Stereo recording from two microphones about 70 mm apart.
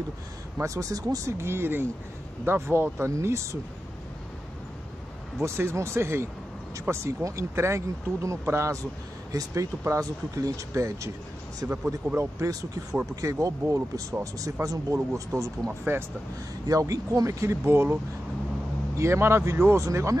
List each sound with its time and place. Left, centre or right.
0.6 s speech: right
1.4 s speech: right
5.4 s speech: right
16.6 s speech: right
18.9 s speech: right